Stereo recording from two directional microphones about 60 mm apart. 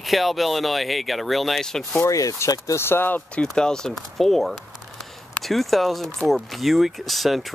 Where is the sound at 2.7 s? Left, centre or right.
Left.